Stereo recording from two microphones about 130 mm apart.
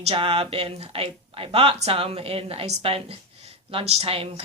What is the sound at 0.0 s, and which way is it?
Speech, 50° right (ahead or behind).